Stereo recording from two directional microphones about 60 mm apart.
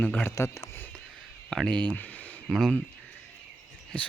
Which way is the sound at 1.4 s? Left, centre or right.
Centre.